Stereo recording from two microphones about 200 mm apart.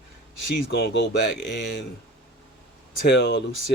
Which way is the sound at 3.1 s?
65° left (ahead or behind).